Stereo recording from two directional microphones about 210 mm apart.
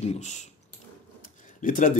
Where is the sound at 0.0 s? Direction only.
35° left (ahead or behind).